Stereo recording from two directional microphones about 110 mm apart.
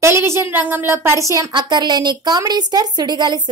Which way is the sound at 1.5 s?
40° right (ahead or behind).